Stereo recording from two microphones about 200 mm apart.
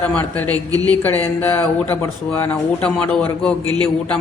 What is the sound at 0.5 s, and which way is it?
Speech, 20° right (ahead or behind).